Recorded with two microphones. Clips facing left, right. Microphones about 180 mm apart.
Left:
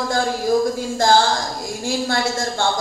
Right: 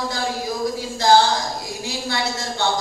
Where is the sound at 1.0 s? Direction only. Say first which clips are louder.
Right 1 dB; 50° left (ahead or behind).